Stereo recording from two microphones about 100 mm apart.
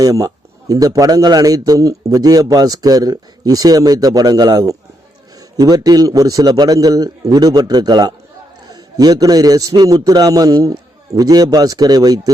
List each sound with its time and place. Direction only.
0.0 s a man's voice: 35° right (ahead or behind)